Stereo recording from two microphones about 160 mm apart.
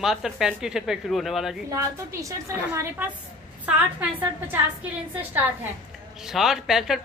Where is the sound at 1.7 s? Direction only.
20° right (ahead or behind).